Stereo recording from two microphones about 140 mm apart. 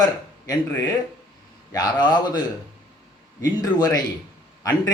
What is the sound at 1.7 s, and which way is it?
A man's voice, 30° left (ahead or behind).